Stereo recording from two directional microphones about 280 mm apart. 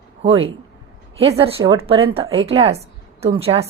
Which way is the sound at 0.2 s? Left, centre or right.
Right.